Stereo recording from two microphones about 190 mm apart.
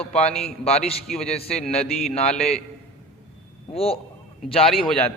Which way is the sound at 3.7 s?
30° left (ahead or behind).